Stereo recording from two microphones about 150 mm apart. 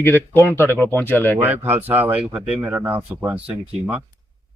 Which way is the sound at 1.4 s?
15° right (ahead or behind).